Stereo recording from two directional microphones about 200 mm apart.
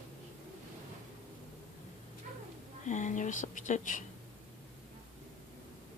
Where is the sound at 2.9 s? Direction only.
35° left (ahead or behind).